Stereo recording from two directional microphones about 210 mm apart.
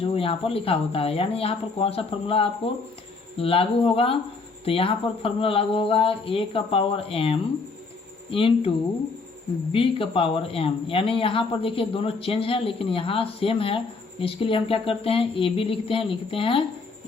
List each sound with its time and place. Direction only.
0.0 s speech: 25° left (ahead or behind)
9.7 s speech: 25° left (ahead or behind)